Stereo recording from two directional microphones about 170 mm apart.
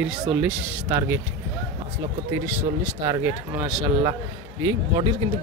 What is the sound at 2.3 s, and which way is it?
Speech, 15° right (ahead or behind).